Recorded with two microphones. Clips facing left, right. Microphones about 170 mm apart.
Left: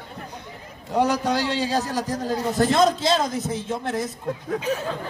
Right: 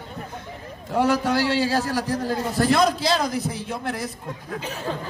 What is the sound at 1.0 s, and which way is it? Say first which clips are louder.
A man's voice: right 1 dB; 15° left (ahead or behind).